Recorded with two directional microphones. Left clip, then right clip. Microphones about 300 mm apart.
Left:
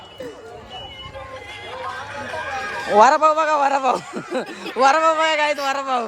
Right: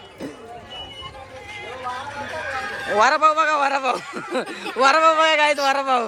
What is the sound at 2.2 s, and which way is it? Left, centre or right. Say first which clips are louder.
Speech: left 2 dB; centre.